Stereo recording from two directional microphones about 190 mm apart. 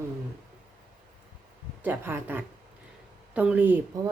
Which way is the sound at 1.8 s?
10° right (ahead or behind).